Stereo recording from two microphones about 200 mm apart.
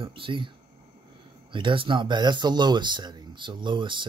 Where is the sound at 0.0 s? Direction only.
25° right (ahead or behind).